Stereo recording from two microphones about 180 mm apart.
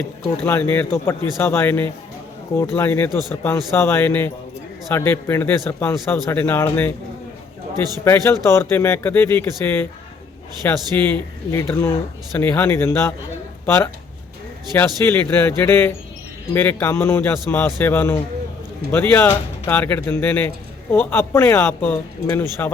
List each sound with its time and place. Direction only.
0.3 s speech: 10° left (ahead or behind)
8.0 s speech: 15° left (ahead or behind)
14.8 s speech: 10° left (ahead or behind)